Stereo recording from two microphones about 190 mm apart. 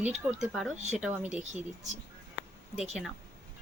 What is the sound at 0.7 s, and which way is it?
Speech, 35° right (ahead or behind).